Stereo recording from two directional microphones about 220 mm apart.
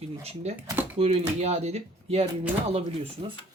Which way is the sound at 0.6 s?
10° right (ahead or behind).